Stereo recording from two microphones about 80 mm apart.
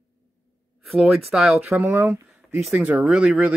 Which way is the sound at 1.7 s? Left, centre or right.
Right.